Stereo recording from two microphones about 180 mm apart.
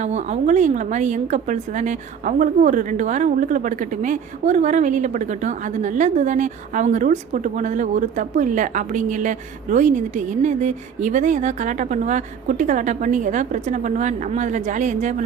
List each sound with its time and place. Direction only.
0.0 s a woman's voice: 40° right (ahead or behind)